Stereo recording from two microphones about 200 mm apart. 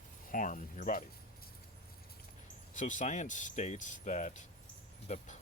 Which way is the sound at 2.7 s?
40° left (ahead or behind).